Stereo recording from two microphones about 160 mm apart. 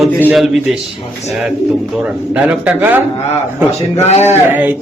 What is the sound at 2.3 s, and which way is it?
Speech, 10° right (ahead or behind).